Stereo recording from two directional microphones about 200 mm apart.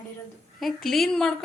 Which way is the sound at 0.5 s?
Centre (ahead or behind).